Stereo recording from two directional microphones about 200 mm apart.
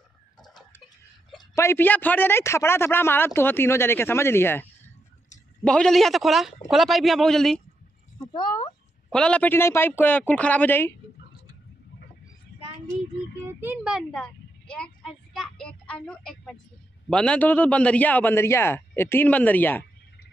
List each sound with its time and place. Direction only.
0.4 s tick-tock: 20° left (ahead or behind)
1.5 s a man's voice: 15° left (ahead or behind)
8.3 s speech: 25° left (ahead or behind)
9.1 s a man's voice: 5° left (ahead or behind)
13.6 s a sound: 10° right (ahead or behind)
17.1 s a man's voice: 5° left (ahead or behind)